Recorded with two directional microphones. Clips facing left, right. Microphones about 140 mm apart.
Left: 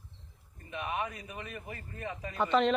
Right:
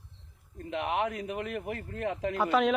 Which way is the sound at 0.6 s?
80° right.